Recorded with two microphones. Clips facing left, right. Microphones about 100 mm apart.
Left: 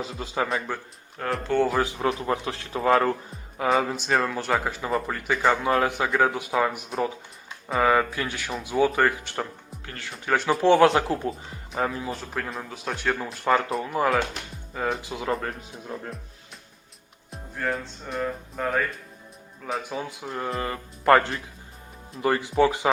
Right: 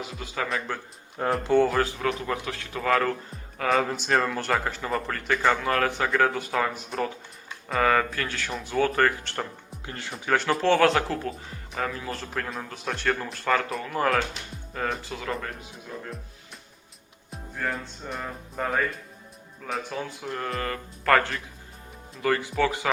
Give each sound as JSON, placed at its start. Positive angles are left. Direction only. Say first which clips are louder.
{"t": 0.0, "sound": "speech", "louder": "left 4 dB", "side_deg": 30}
{"t": 0.7, "sound": "speech", "louder": "left 1 dB", "side_deg": 5}
{"t": 1.2, "sound": "speech", "louder": "right 3 dB", "side_deg": -20}
{"t": 1.5, "sound": "speech", "louder": "right 1 dB", "side_deg": 0}
{"t": 1.8, "sound": "speech", "louder": "left 1 dB", "side_deg": 20}
{"t": 3.7, "sound": "speech", "louder": "left 1 dB", "side_deg": 5}
{"t": 9.8, "sound": "speech", "louder": "right 2 dB", "side_deg": -25}
{"t": 10.1, "sound": "speech", "louder": "left 1 dB", "side_deg": 0}
{"t": 10.6, "sound": "speech", "louder": "left 5 dB", "side_deg": 20}
{"t": 12.1, "sound": "speech", "louder": "left 1 dB", "side_deg": 5}
{"t": 13.4, "sound": "speech", "louder": "left 4 dB", "side_deg": 15}
{"t": 15.0, "sound": "speech", "louder": "left 3 dB", "side_deg": 15}
{"t": 17.3, "sound": "music", "louder": "left 2 dB", "side_deg": 0}
{"t": 19.9, "sound": "speech", "louder": "left 1 dB", "side_deg": 15}